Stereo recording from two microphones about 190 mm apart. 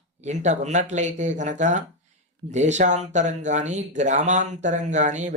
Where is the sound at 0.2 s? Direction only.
35° right (ahead or behind).